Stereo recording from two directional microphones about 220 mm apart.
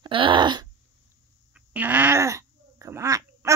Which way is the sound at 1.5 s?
5° right (ahead or behind).